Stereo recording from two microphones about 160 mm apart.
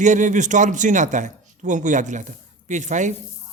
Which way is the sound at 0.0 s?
50° right (ahead or behind).